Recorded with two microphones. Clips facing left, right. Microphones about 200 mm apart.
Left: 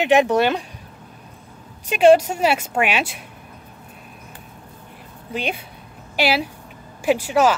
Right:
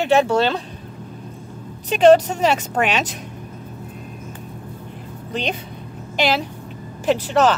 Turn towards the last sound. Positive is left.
turn(degrees=10)  # may be behind; listen again after turning